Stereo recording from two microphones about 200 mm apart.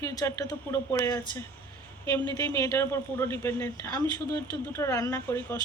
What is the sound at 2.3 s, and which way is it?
Speech, 15° left (ahead or behind).